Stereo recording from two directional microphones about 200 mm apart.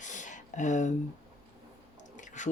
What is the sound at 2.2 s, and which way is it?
Chewing, 40° left (ahead or behind).